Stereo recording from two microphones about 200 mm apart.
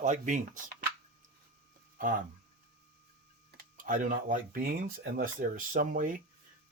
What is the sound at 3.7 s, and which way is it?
Speech, 40° right (ahead or behind).